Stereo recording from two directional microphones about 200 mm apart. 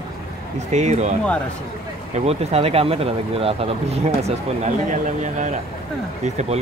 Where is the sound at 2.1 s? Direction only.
30° right (ahead or behind).